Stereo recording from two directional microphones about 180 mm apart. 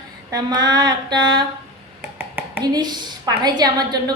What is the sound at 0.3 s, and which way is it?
A woman's voice, 20° right (ahead or behind).